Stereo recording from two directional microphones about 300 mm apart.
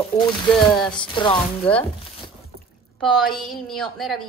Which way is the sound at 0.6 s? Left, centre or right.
Centre.